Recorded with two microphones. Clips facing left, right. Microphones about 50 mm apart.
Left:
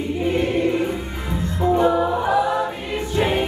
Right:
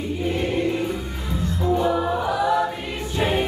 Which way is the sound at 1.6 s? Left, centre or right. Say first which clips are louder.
Left 4 dB; left.